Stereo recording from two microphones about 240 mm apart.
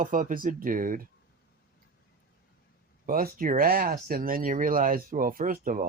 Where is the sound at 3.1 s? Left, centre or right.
Right.